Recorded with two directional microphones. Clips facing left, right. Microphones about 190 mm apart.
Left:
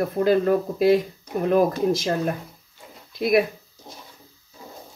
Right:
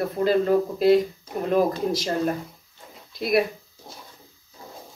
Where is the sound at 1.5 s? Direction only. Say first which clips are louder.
Left 2 dB; 50° left (ahead or behind).